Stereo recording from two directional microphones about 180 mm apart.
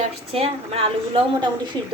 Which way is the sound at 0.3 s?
30° right (ahead or behind).